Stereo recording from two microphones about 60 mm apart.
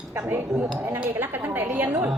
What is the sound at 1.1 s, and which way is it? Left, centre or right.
Speech, right.